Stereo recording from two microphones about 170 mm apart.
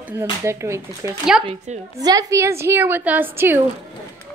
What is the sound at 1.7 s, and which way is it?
Speech, 40° right (ahead or behind).